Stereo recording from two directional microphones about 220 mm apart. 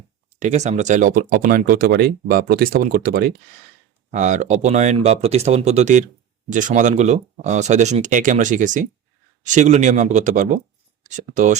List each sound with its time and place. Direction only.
0.3 s speech: 30° right (ahead or behind)